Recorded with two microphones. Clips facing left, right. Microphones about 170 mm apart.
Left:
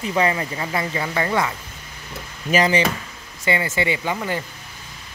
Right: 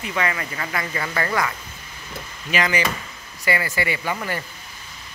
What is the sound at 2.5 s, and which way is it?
Speech, 30° left (ahead or behind).